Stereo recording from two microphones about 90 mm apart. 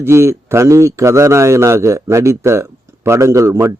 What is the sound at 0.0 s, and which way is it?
A man's voice, 30° right (ahead or behind).